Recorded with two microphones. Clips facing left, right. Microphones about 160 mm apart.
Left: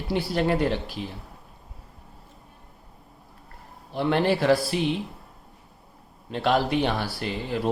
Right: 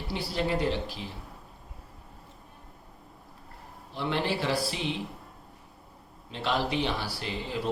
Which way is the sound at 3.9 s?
55° left (ahead or behind).